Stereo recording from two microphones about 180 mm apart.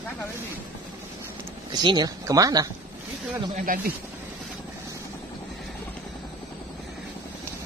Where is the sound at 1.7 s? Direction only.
25° right (ahead or behind).